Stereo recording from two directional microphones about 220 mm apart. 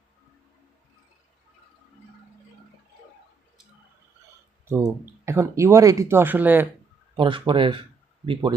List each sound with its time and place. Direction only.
4.7 s speech: 10° right (ahead or behind)
7.2 s speech: 20° right (ahead or behind)